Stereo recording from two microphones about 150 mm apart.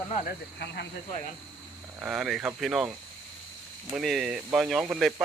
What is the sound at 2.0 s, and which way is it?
Speech, 5° right (ahead or behind).